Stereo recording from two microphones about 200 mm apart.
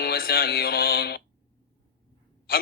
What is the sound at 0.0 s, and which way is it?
Speech, 50° left (ahead or behind).